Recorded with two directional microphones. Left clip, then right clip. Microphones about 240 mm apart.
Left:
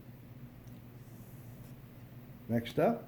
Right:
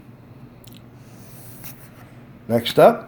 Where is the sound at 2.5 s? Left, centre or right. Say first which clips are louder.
Right 18 dB; right.